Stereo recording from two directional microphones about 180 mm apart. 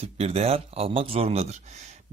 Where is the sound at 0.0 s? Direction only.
35° right (ahead or behind).